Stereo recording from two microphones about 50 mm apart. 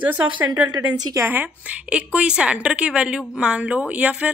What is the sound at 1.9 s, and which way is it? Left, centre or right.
A woman's voice, right.